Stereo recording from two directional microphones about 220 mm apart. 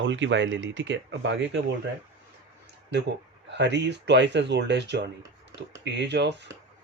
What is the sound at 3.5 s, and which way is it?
Speech, 50° right (ahead or behind).